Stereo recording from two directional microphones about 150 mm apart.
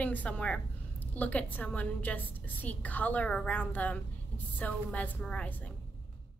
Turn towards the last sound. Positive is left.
turn(degrees=10)  # may be behind; listen again after turning